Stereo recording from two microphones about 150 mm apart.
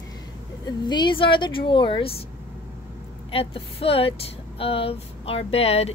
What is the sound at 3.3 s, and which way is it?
Speech, 40° left (ahead or behind).